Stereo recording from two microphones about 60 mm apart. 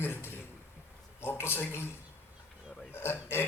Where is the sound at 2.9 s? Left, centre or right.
Left.